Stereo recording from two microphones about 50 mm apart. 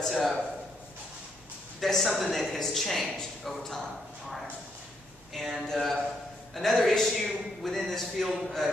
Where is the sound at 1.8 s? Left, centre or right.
Centre.